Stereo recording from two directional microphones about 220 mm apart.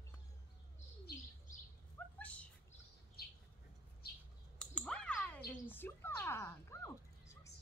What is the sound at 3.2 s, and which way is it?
Bird, 45° left (ahead or behind).